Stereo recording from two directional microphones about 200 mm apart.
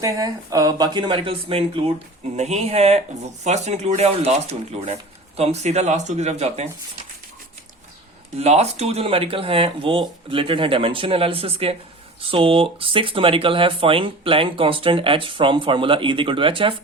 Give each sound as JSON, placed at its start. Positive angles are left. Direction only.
{"t": 0.0, "sound": "speech", "side_deg": -15}
{"t": 8.4, "sound": "speech", "side_deg": -30}